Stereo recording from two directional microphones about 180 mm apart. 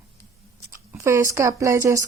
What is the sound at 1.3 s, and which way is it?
Speech, 15° right (ahead or behind).